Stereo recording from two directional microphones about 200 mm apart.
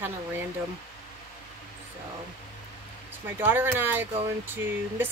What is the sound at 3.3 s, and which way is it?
Speech, 10° right (ahead or behind).